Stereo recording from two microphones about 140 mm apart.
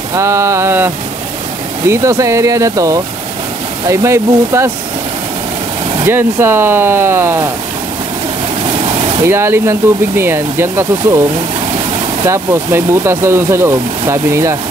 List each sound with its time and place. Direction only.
0.1 s speech: 20° right (ahead or behind)
6.0 s speech: 15° right (ahead or behind)
9.2 s speech: 20° right (ahead or behind)
12.3 s speech: 20° right (ahead or behind)